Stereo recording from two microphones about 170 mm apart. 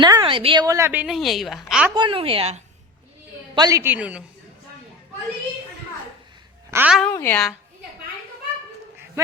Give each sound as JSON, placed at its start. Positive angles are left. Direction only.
{"t": 0.0, "sound": "a woman's voice", "side_deg": -25}
{"t": 2.0, "sound": "a woman's voice", "side_deg": -30}
{"t": 3.5, "sound": "a woman's voice", "side_deg": -20}
{"t": 6.7, "sound": "a child's voice", "side_deg": -10}
{"t": 7.1, "sound": "a woman's voice", "side_deg": 15}